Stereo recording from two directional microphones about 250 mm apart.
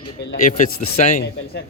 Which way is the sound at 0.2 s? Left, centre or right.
Left.